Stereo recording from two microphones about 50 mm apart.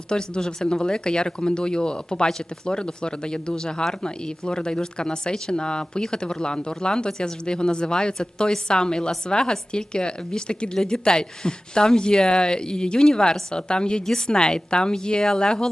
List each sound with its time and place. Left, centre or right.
0.1 s speech: centre